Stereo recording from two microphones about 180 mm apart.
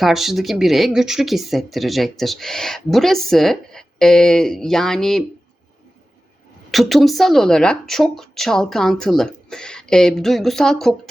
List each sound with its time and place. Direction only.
0.0 s speech: centre (ahead or behind)
6.7 s speech: centre (ahead or behind)